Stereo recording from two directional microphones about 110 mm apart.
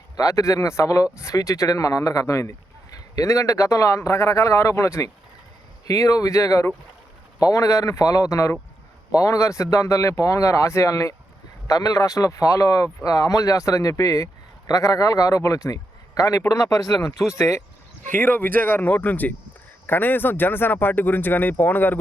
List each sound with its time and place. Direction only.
0.2 s speech: 30° left (ahead or behind)